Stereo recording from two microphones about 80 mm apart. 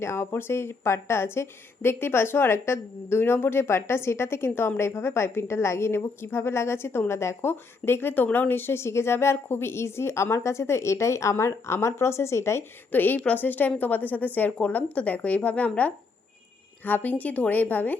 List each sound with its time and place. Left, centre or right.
0.0 s speech: left
12.9 s a woman's voice: left